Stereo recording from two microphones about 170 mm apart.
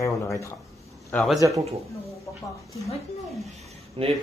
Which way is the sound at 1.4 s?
20° right (ahead or behind).